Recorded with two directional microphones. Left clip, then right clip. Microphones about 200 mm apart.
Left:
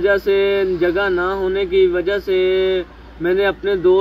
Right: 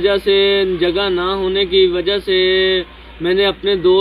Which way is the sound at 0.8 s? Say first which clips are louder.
Right 1 dB; 5° left (ahead or behind).